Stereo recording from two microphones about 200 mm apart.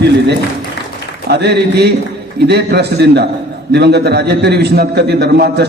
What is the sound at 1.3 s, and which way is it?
A man's voice, 55° right (ahead or behind).